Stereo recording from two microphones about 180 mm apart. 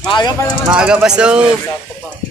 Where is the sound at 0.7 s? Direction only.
5° right (ahead or behind).